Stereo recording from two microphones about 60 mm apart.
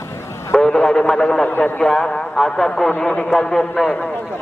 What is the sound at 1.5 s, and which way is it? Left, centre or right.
Speech, left.